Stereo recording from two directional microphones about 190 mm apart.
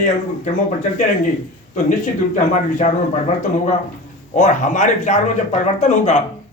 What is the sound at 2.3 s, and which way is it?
Speech, 40° left (ahead or behind).